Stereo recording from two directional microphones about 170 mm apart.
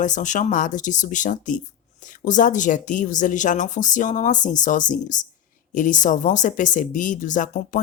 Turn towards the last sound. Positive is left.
turn(degrees=50)  # may be behind; listen again after turning